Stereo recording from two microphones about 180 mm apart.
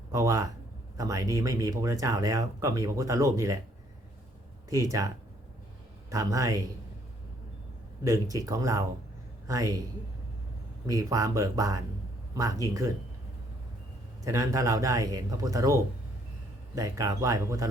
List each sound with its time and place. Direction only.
0.1 s speech: 20° right (ahead or behind)
4.7 s speech: 20° right (ahead or behind)
8.0 s speech: 20° right (ahead or behind)
10.8 s speech: 20° right (ahead or behind)
14.3 s speech: 20° right (ahead or behind)